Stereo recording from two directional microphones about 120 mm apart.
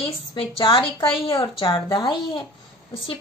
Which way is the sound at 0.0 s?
40° left (ahead or behind).